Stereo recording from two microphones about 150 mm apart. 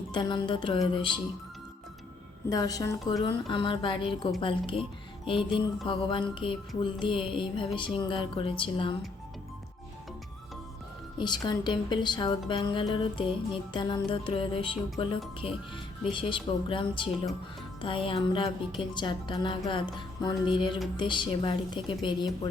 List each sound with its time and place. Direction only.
0.1 s speech: 30° left (ahead or behind)
2.5 s a woman's voice: 25° left (ahead or behind)
11.2 s speech: 30° left (ahead or behind)